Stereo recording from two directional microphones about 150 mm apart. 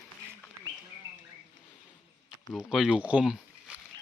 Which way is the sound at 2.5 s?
5° right (ahead or behind).